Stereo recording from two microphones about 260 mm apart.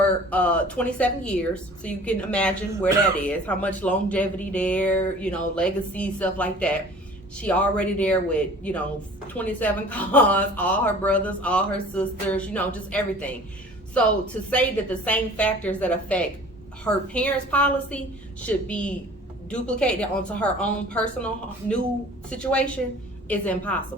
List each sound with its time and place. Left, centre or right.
0.3 s speech: centre
14.5 s speech: centre
22.3 s speech: centre